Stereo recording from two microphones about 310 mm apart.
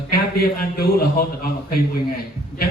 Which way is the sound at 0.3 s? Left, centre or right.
Left.